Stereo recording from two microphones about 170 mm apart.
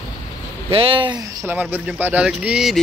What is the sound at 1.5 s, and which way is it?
Speech, 10° right (ahead or behind).